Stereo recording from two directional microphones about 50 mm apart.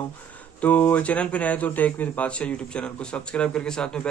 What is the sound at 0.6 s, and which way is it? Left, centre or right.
Speech, left.